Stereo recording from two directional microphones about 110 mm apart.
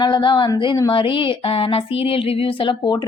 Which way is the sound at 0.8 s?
50° left (ahead or behind).